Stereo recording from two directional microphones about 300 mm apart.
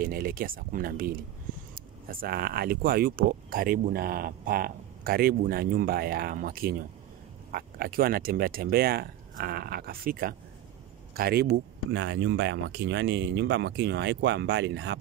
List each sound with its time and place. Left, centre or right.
0.0 s speech: right